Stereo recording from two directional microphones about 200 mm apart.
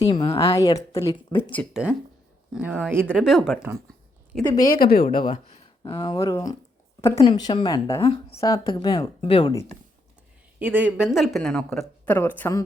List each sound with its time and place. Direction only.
0.0 s a woman's voice: 25° left (ahead or behind); by 1.6 s 10° left (ahead or behind)
1.7 s speech: 5° right (ahead or behind)
4.8 s speech: 50° left (ahead or behind)
5.2 s a woman's voice: 25° left (ahead or behind)
8.0 s a woman's voice: 25° left (ahead or behind)
8.4 s a woman's voice: 15° left (ahead or behind)
10.6 s a woman's voice: 10° right (ahead or behind); by 12.6 s 10° left (ahead or behind)